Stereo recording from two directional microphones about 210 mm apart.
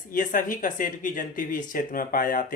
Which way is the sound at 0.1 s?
40° left (ahead or behind).